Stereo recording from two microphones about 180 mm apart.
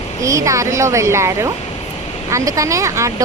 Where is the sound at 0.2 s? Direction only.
15° right (ahead or behind).